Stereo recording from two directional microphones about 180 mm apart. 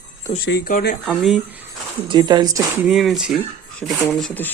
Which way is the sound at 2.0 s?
25° right (ahead or behind).